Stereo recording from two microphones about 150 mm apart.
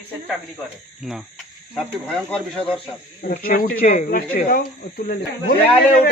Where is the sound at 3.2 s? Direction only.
65° left (ahead or behind).